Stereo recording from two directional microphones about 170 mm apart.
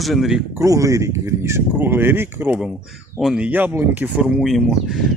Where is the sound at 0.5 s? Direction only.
20° right (ahead or behind).